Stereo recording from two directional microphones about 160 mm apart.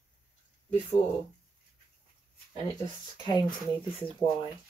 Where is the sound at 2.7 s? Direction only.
25° left (ahead or behind).